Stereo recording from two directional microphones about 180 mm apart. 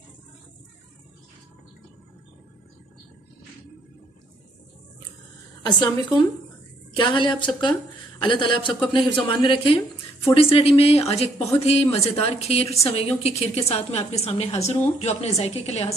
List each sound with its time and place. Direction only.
5.6 s a woman's voice: 25° left (ahead or behind)